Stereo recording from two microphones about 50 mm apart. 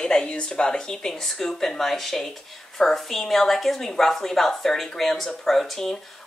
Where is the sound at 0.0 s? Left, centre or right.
Centre.